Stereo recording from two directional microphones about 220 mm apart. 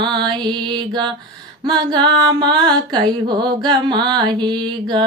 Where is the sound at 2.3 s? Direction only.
20° right (ahead or behind).